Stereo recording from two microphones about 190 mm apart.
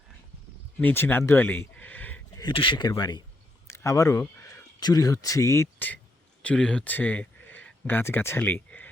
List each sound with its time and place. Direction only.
0.8 s speech: 10° left (ahead or behind)
2.3 s speech: 25° left (ahead or behind); by 8.9 s 10° left (ahead or behind)